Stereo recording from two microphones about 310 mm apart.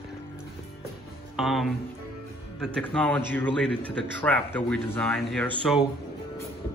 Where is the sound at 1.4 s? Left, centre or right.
Centre.